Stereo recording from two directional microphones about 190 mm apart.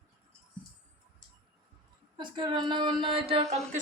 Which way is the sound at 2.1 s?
25° right (ahead or behind).